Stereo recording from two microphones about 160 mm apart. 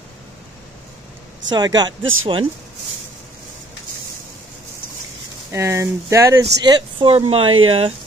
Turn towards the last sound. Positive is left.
turn(degrees=-35)  # may be behind; listen again after turning